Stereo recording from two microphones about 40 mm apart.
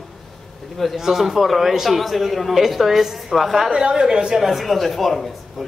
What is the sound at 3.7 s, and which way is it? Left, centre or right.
Speech, centre.